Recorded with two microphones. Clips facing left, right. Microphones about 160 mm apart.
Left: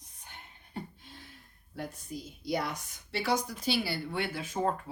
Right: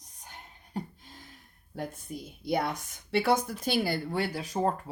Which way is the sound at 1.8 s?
55° right (ahead or behind).